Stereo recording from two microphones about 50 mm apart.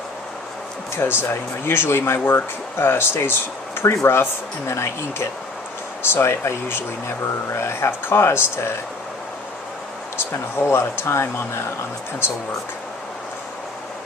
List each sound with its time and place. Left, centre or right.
1.2 s speech: left
6.1 s speech: left
10.2 s speech: left